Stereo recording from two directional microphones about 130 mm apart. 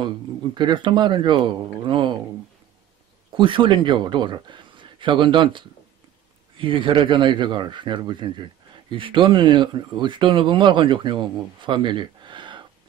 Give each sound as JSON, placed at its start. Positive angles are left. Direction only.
{"t": 0.6, "sound": "speech", "side_deg": -35}
{"t": 3.3, "sound": "speech", "side_deg": -40}